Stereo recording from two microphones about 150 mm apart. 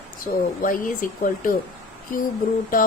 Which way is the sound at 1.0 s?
65° left (ahead or behind).